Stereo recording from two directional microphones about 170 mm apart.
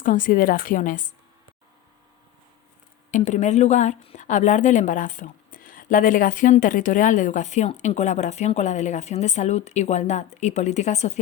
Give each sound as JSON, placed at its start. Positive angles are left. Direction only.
{"t": 0.0, "sound": "a woman's voice", "side_deg": 50}
{"t": 3.1, "sound": "a woman's voice", "side_deg": 45}